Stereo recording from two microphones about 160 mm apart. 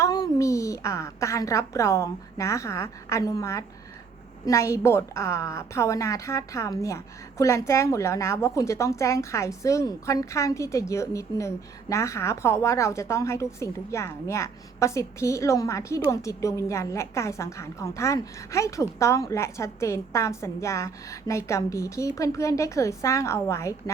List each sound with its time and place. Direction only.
0.0 s a woman's voice: 20° left (ahead or behind)